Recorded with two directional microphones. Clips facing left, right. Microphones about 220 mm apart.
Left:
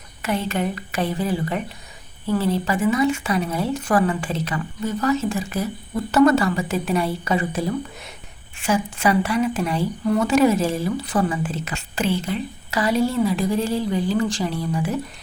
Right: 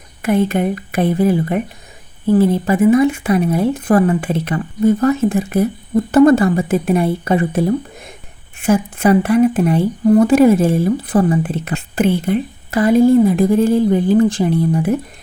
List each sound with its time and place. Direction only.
0.2 s speech: 55° right (ahead or behind)
8.6 s speech: 55° right (ahead or behind)
10.0 s speech: 35° right (ahead or behind)
10.2 s speech: 55° right (ahead or behind)